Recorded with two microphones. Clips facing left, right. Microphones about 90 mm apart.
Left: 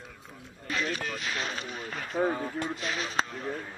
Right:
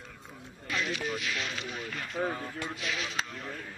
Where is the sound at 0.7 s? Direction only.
40° left (ahead or behind).